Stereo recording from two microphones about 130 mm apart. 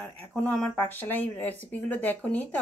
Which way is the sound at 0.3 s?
5° left (ahead or behind).